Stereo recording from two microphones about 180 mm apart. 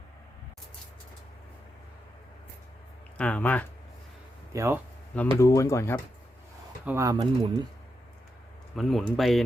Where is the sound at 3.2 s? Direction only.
10° left (ahead or behind).